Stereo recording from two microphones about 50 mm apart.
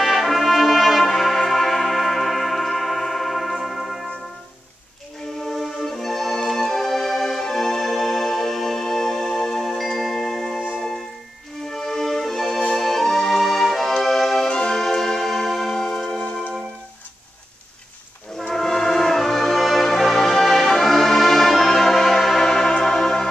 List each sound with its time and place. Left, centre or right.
0.0 s brass instrument: centre
1.0 s tick-tock: centre
5.5 s music: centre
11.7 s music: centre
14.5 s music: centre
18.5 s music: centre